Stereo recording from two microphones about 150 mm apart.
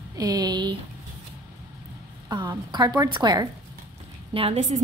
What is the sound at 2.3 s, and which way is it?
A woman's voice, 30° right (ahead or behind).